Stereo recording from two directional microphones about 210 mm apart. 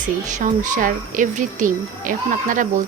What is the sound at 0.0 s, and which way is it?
Speech, 35° right (ahead or behind).